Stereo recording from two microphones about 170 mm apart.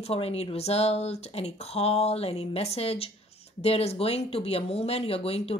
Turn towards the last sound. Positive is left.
turn(degrees=35)  # may be behind; listen again after turning